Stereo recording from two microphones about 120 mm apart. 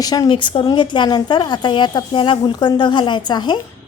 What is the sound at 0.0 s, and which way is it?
A woman's voice, 35° left (ahead or behind).